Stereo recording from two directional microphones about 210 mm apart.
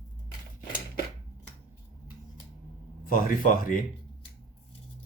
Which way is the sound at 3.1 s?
40° left (ahead or behind).